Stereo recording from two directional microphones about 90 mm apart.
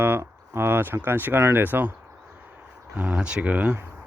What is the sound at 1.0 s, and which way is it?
Speech, 20° right (ahead or behind).